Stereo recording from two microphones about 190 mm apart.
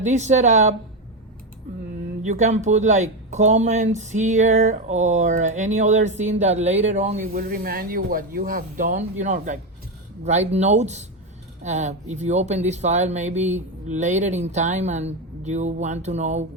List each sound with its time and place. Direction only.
0.0 s speech: 40° right (ahead or behind)
2.2 s speech: 40° right (ahead or behind)
7.3 s speech: 50° right (ahead or behind)